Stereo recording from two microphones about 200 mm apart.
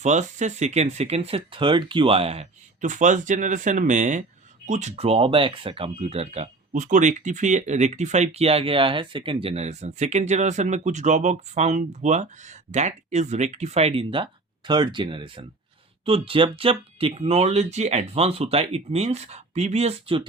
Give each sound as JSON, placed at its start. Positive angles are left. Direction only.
{"t": 0.0, "sound": "speech", "side_deg": -35}